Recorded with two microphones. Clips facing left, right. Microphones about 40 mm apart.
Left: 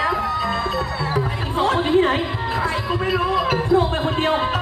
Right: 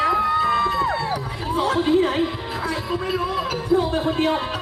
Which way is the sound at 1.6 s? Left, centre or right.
Left.